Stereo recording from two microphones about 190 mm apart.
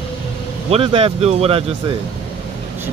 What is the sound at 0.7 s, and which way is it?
Speech, 30° right (ahead or behind).